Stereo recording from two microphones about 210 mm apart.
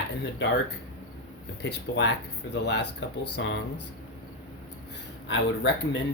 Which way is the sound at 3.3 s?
60° left (ahead or behind).